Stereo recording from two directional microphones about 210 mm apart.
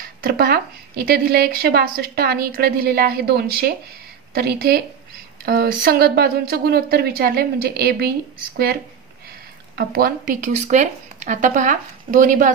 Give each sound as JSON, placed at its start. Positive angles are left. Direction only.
{"t": 0.0, "sound": "a woman's voice", "side_deg": -45}
{"t": 9.8, "sound": "speech", "side_deg": -45}